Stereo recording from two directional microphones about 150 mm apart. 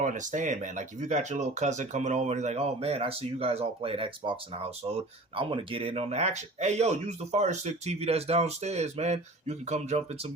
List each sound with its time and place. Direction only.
0.0 s speech: 60° right (ahead or behind)